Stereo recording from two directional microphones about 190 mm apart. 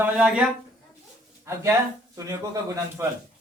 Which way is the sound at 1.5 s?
15° right (ahead or behind).